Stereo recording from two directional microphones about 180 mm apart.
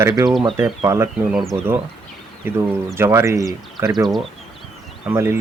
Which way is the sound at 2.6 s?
15° right (ahead or behind).